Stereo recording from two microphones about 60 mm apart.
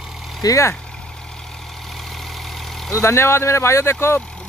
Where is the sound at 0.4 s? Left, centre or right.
Left.